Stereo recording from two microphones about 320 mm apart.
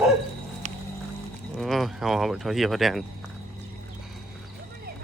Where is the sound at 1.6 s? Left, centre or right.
Centre.